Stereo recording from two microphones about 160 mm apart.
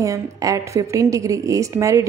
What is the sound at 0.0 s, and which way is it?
A woman's voice, 20° right (ahead or behind).